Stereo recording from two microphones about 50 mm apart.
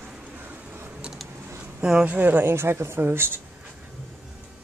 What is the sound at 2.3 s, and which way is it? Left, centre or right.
Speech, right.